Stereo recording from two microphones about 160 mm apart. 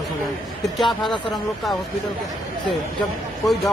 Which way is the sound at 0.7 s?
Centre (ahead or behind).